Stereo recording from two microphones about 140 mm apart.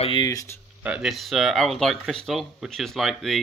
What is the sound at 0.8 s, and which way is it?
Speech, 5° right (ahead or behind).